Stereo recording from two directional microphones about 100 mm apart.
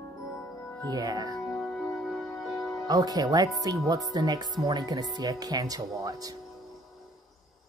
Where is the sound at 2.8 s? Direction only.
40° right (ahead or behind).